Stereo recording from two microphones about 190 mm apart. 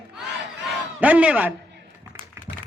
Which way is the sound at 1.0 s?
5° right (ahead or behind).